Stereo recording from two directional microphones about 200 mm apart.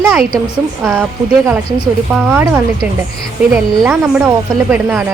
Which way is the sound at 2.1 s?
10° right (ahead or behind).